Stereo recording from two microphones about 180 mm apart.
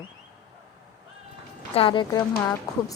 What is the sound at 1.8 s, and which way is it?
Speech, 30° left (ahead or behind).